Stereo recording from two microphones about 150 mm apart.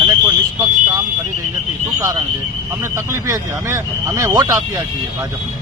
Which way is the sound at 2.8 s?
20° right (ahead or behind).